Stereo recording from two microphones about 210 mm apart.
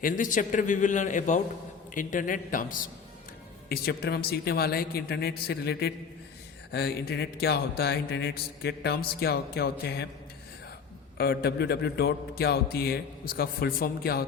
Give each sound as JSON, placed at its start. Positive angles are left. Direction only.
{"t": 0.0, "sound": "a man's voice", "side_deg": 40}
{"t": 11.2, "sound": "speech", "side_deg": 50}